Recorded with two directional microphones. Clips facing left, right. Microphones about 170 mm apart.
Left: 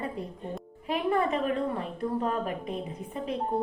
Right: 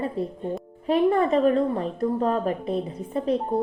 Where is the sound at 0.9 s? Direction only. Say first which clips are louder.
Right 7 dB; 35° right (ahead or behind).